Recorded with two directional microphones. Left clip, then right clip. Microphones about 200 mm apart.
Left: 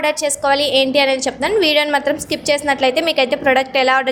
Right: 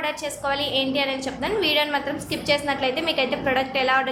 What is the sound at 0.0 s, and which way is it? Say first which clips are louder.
A woman's voice: left 9 dB; 40° left (ahead or behind).